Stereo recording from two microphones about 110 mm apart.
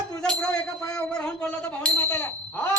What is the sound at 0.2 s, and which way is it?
Speech, 10° left (ahead or behind).